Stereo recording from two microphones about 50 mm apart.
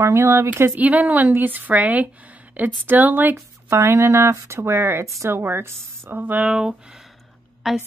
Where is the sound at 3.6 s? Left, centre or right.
Right.